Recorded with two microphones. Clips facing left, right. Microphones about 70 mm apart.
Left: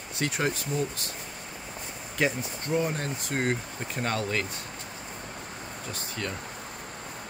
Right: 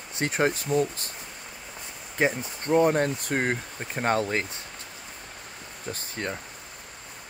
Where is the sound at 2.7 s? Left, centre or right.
Right.